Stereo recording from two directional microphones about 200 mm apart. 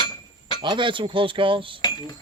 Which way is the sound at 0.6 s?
25° right (ahead or behind).